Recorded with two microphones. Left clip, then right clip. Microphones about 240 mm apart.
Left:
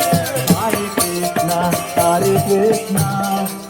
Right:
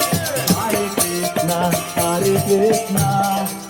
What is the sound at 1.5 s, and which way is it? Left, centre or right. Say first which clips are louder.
Music: left 3 dB; left.